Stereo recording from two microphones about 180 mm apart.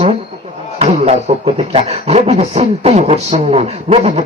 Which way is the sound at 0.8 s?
40° right (ahead or behind).